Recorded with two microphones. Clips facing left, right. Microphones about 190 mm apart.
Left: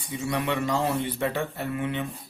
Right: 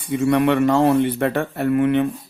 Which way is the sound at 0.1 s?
60° right (ahead or behind).